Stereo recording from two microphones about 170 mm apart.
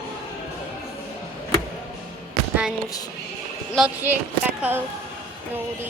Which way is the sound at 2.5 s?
5° right (ahead or behind).